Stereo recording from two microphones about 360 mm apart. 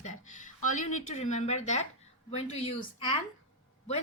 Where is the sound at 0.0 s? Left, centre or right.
Left.